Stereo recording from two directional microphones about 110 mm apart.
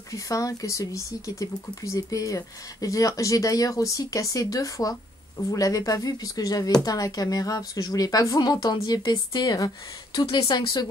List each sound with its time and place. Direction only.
0.1 s speech: 30° left (ahead or behind)